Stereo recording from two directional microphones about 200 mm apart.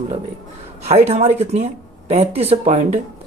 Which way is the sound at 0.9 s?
35° right (ahead or behind).